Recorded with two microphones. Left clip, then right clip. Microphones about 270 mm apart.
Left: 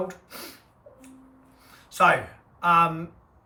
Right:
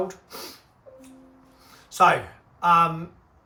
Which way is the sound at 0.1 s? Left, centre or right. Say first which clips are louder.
Right 2 dB; centre.